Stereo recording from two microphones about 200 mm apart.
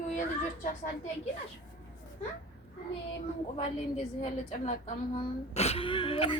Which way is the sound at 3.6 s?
35° left (ahead or behind).